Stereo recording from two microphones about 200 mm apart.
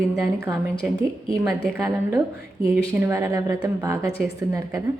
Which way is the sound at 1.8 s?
15° right (ahead or behind).